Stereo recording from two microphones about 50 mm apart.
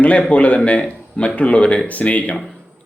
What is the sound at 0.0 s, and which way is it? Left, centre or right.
Speech, left.